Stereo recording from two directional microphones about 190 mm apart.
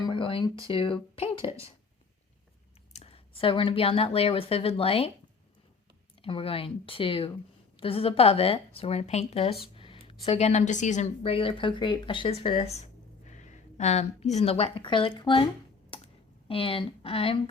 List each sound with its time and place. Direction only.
0.0 s a sound: 25° left (ahead or behind)
0.7 s speech: 30° left (ahead or behind)
2.9 s speech: 30° left (ahead or behind)
6.2 s a woman's voice: 30° left (ahead or behind)
15.9 s computer keyboard: 30° left (ahead or behind)
16.5 s speech: 30° left (ahead or behind)